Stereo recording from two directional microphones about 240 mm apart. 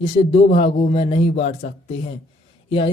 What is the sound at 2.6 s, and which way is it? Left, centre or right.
Speech, left.